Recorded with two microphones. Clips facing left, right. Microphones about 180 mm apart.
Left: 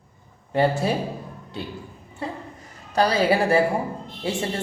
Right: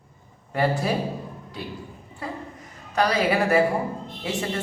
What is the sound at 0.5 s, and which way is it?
Speech, 25° left (ahead or behind).